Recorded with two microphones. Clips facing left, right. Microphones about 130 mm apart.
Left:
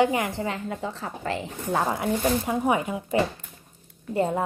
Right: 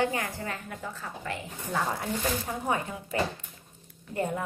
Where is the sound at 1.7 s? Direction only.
40° left (ahead or behind).